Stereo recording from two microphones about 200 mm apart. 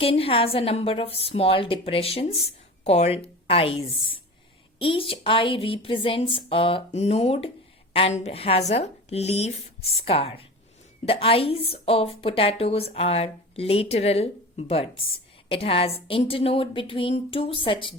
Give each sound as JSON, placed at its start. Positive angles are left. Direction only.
{"t": 0.0, "sound": "a woman's voice", "side_deg": 30}